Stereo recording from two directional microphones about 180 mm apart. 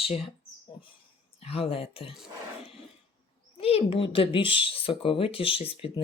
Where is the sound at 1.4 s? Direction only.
35° left (ahead or behind).